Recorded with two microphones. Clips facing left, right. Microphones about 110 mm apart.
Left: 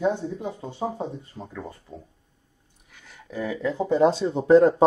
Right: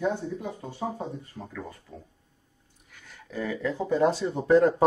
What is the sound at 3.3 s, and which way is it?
Speech, 15° left (ahead or behind).